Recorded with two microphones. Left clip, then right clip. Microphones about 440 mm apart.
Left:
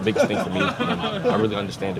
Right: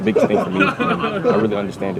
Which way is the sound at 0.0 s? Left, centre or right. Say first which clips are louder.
Right 4 dB; left.